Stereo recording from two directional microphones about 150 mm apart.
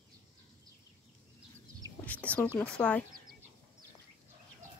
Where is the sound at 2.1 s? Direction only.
10° left (ahead or behind).